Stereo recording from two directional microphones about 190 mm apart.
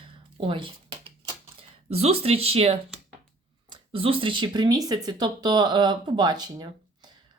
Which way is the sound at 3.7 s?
30° right (ahead or behind).